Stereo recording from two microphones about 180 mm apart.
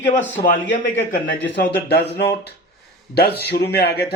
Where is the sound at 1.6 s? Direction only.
65° left (ahead or behind).